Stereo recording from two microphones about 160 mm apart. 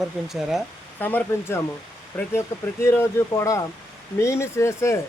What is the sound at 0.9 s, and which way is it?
Speech, 10° left (ahead or behind).